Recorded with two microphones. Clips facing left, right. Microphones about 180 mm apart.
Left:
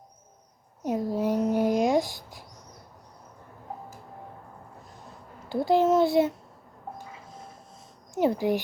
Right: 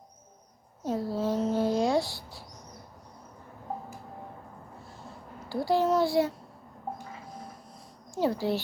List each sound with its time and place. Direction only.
0.8 s a sound: 15° left (ahead or behind)
5.5 s a child's voice: 20° left (ahead or behind)
8.1 s a child's voice: 20° left (ahead or behind)